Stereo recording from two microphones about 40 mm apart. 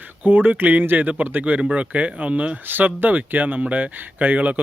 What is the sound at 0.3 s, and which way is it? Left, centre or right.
A man's voice, right.